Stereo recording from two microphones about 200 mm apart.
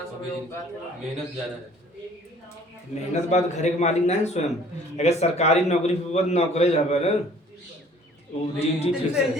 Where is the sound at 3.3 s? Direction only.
35° left (ahead or behind).